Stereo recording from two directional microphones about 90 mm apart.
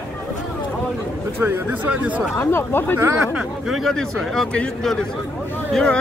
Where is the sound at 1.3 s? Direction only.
20° right (ahead or behind).